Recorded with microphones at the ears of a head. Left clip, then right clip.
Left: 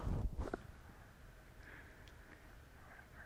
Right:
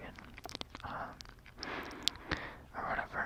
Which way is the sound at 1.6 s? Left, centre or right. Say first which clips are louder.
Right 16 dB; right.